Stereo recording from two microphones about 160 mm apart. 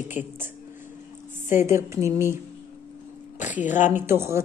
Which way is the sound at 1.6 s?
15° right (ahead or behind).